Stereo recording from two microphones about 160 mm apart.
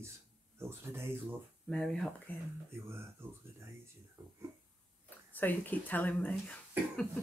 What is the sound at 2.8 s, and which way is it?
Speech, 15° right (ahead or behind).